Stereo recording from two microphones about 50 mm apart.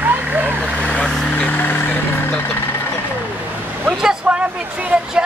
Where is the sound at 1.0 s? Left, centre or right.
Centre.